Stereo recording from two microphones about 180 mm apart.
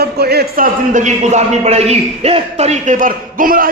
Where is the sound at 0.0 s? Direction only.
60° right (ahead or behind).